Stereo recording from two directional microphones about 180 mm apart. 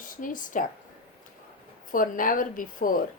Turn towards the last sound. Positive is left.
turn(degrees=50)  # may be behind; listen again after turning